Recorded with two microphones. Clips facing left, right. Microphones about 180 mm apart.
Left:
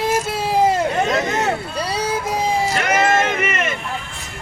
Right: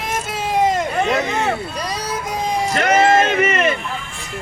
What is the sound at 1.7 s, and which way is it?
Vehicle, 30° left (ahead or behind).